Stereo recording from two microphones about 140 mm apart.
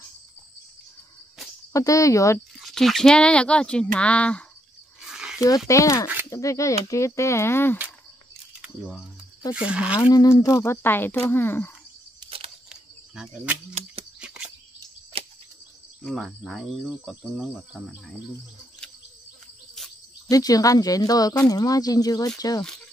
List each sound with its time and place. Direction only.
1.7 s speech: 25° left (ahead or behind)
2.6 s speech: centre (ahead or behind)
5.0 s a sound: 5° right (ahead or behind)
5.7 s speech: 20° left (ahead or behind)
8.5 s camera: 5° right (ahead or behind)
9.5 s speech: 10° right (ahead or behind)
10.1 s speech: 20° left (ahead or behind)
12.2 s camera: 40° right (ahead or behind)
12.6 s cricket: 5° right (ahead or behind)
14.2 s a sound: 10° right (ahead or behind)
15.1 s a sound: 40° right (ahead or behind)
16.0 s cricket: 5° left (ahead or behind)
20.2 s speech: 25° left (ahead or behind)